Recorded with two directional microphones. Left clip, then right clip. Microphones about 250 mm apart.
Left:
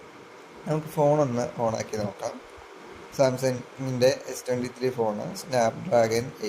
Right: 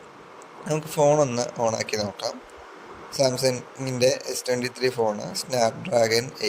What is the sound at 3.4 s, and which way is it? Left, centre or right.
Speech, right.